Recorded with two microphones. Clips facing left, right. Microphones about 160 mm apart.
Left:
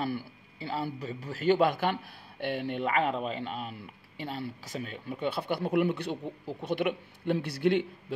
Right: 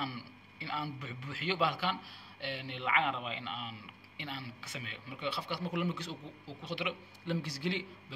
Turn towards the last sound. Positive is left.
turn(degrees=60)  # may be behind; listen again after turning